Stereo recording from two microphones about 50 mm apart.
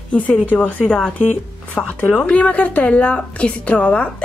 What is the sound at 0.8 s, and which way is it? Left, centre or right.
Speech, centre.